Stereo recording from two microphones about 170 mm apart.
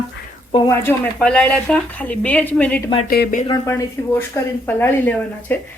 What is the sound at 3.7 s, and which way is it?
Speech, 15° left (ahead or behind).